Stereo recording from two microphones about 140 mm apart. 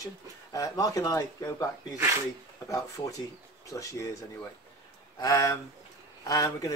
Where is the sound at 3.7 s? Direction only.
20° left (ahead or behind).